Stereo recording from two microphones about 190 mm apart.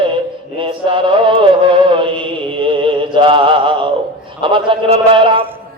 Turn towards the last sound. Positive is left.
turn(degrees=-25)  # may be behind; listen again after turning